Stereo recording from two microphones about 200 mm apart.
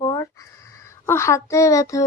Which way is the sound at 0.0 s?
20° left (ahead or behind).